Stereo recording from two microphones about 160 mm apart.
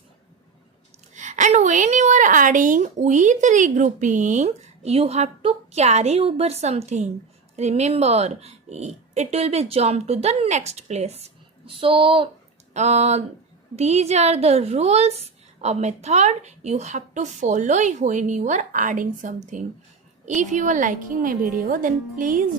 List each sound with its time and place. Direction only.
1.1 s a woman's voice: 50° right (ahead or behind); by 12.3 s 35° right (ahead or behind)
12.7 s a woman's voice: 45° right (ahead or behind)